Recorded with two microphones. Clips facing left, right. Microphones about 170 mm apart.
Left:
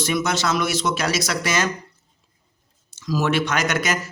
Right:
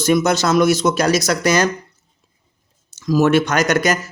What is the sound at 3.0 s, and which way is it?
Speech, 50° right (ahead or behind).